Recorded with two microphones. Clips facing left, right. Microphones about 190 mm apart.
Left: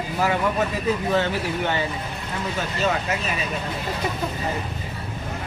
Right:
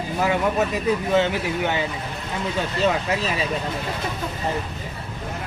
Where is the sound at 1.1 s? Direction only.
15° right (ahead or behind).